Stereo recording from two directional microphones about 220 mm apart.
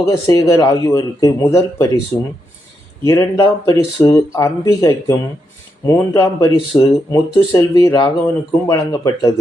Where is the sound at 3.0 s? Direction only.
15° left (ahead or behind).